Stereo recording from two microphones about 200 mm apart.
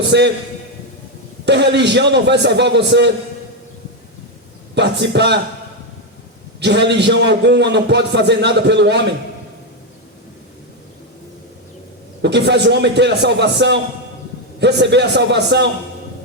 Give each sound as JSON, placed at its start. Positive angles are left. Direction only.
{"t": 0.1, "sound": "a man's voice", "side_deg": -60}
{"t": 1.5, "sound": "a man's voice", "side_deg": -60}
{"t": 4.7, "sound": "a man's voice", "side_deg": -60}
{"t": 6.6, "sound": "a man's voice", "side_deg": -60}
{"t": 12.2, "sound": "a man's voice", "side_deg": -60}